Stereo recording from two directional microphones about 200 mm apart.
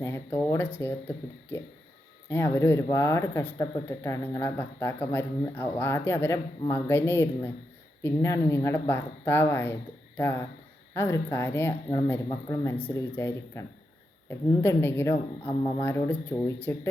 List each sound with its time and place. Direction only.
0.0 s speech: 10° left (ahead or behind)